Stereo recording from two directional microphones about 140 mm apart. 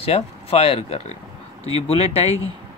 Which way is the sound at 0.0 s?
45° left (ahead or behind).